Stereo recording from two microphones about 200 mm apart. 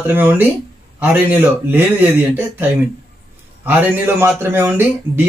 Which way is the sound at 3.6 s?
10° right (ahead or behind).